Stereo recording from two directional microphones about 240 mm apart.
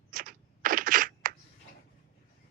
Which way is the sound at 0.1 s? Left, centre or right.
Right.